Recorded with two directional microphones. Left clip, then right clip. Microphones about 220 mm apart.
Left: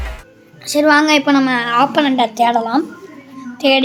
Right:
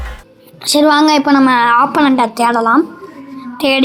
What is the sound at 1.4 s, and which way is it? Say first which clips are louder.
Speech: right 5 dB; 15° right (ahead or behind).